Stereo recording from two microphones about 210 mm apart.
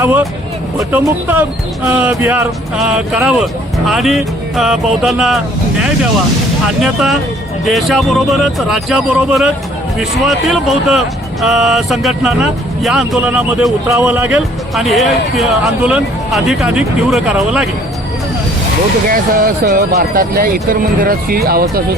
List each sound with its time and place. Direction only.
0.0 s speech: 10° right (ahead or behind)
6.8 s speech: centre (ahead or behind)
19.0 s speech: 40° right (ahead or behind)